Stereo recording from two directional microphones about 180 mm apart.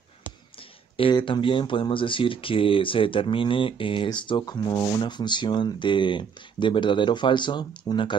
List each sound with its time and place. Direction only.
0.9 s speech: 30° left (ahead or behind)